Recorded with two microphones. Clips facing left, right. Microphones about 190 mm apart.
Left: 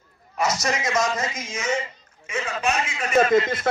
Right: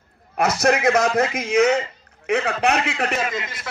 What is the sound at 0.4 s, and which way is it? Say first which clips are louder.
A man's voice: right 6 dB; 60° right (ahead or behind).